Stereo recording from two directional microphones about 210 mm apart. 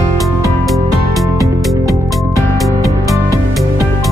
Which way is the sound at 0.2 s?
Centre (ahead or behind).